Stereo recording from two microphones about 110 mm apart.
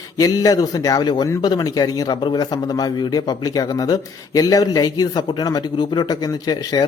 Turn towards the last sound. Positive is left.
turn(degrees=35)  # may be behind; listen again after turning